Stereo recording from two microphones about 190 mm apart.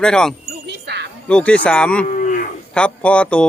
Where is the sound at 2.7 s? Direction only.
5° left (ahead or behind).